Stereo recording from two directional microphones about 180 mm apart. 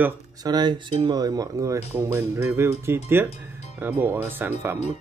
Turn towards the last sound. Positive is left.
turn(degrees=-10)  # may be behind; listen again after turning